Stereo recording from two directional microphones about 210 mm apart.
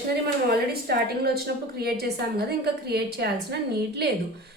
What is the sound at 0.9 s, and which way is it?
A woman's voice, 50° right (ahead or behind).